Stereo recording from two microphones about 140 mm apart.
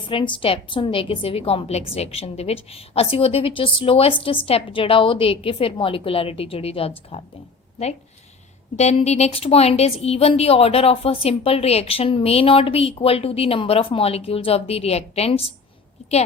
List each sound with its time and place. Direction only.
0.0 s a woman's voice: 40° left (ahead or behind)
8.7 s a woman's voice: 50° left (ahead or behind)